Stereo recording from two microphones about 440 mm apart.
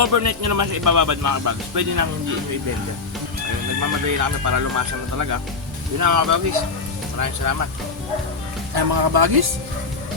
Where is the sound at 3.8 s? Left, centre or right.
Right.